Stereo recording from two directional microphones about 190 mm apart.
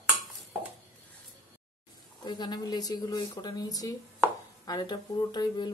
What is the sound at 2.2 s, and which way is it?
A woman's voice, 25° left (ahead or behind).